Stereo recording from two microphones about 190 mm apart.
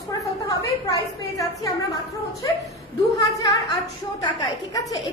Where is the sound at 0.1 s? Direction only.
15° left (ahead or behind).